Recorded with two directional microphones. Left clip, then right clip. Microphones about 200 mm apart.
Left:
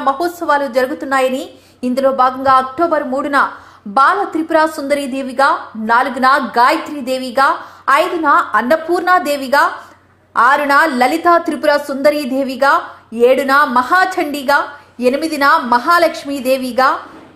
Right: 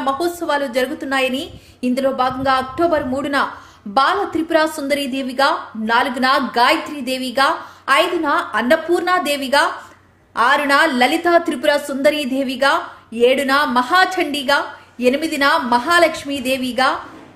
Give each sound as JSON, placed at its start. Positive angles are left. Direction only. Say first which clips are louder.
{"t": 0.0, "sound": "a woman's voice", "louder": "left 4 dB", "side_deg": 0}